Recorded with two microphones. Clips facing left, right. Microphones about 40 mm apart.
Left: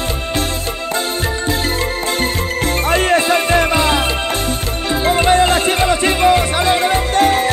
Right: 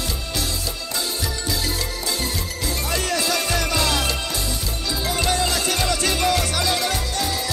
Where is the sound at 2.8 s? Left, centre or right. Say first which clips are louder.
Left 10 dB; left.